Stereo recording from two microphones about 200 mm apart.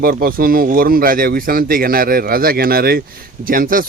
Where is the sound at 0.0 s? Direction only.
45° right (ahead or behind).